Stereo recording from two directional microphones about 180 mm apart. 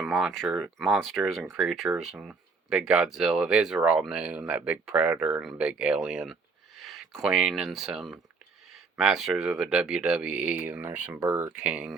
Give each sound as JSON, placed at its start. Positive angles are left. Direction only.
{"t": 0.0, "sound": "speech", "side_deg": 0}